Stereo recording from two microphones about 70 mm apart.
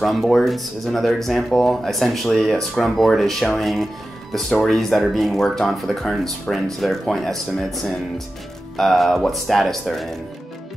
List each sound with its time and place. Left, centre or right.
0.0 s speech: centre